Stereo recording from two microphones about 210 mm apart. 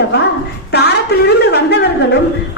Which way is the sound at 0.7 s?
50° left (ahead or behind).